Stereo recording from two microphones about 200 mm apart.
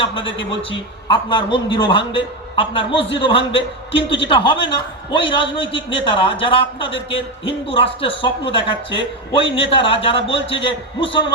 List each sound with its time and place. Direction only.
0.0 s a man's voice: 25° left (ahead or behind)